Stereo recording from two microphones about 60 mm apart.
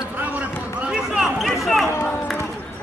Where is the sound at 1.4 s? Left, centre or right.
Centre.